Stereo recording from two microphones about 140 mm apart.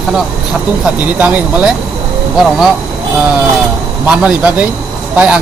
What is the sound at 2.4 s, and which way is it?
Speech, centre (ahead or behind).